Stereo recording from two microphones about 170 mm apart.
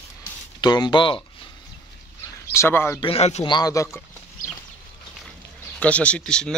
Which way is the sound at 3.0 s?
35° left (ahead or behind).